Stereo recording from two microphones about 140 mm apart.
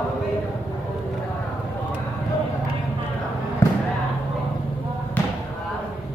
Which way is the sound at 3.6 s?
15° left (ahead or behind).